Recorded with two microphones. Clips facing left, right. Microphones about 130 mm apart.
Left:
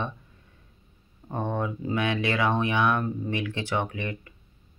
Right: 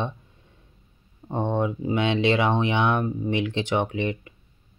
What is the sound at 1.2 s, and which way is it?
Speech, 20° right (ahead or behind).